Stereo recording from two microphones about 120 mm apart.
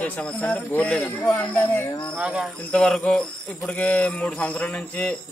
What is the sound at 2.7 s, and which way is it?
Speech, 5° left (ahead or behind).